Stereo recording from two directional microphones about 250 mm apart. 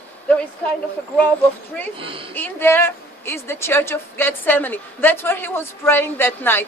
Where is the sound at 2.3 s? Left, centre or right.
Centre.